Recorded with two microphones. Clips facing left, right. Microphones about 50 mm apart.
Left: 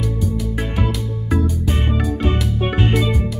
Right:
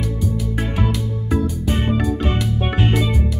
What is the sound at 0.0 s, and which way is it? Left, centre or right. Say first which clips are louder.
Music: left 1 dB; centre.